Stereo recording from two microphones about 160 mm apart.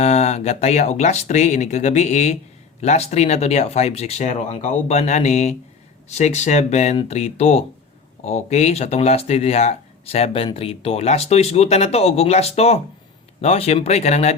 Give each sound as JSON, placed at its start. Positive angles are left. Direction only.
{"t": 0.0, "sound": "speech", "side_deg": 40}